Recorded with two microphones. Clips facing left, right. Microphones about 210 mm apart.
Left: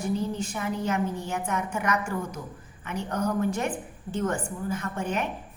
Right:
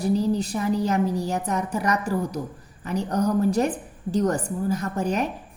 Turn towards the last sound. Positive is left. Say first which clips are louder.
# right 5 dB
turn(degrees=-40)  # may be behind; listen again after turning